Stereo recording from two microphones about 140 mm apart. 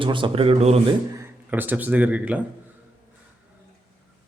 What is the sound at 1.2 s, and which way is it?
Speech, 15° right (ahead or behind).